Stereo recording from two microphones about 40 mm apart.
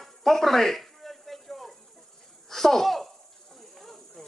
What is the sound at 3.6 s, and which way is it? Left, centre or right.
Snake, centre.